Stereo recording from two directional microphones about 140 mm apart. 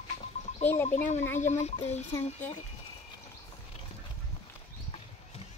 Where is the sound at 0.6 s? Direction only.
20° left (ahead or behind).